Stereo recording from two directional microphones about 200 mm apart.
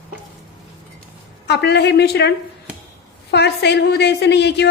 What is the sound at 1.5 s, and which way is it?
A woman's voice, 55° left (ahead or behind).